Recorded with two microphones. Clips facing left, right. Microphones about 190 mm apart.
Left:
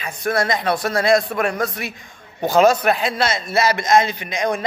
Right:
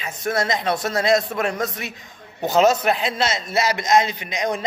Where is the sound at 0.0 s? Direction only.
20° right (ahead or behind).